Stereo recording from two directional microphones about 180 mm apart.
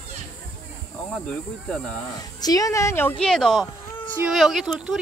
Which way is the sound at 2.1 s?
20° left (ahead or behind).